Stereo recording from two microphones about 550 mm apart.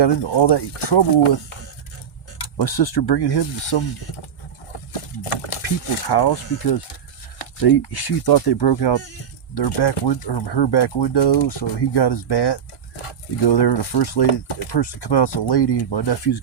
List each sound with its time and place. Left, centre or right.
0.0 s speech: left
2.4 s speech: left
4.9 s a sound: left
5.6 s speech: left
14.3 s speech: left
14.8 s speech: left